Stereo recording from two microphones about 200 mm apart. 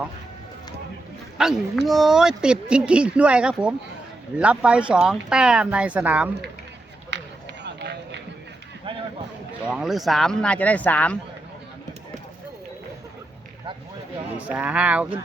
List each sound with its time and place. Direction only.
1.4 s speech: centre (ahead or behind)
7.6 s run: 60° right (ahead or behind)
9.6 s speech: 5° right (ahead or behind)
14.3 s speech: 5° right (ahead or behind)